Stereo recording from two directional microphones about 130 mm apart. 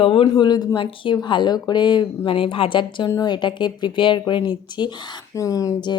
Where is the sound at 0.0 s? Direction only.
45° left (ahead or behind).